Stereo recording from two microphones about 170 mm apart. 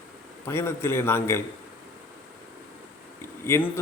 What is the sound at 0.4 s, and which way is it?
Speech, 15° left (ahead or behind).